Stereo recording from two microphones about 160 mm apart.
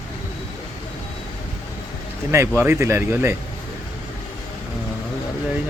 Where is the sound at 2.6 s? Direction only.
15° right (ahead or behind).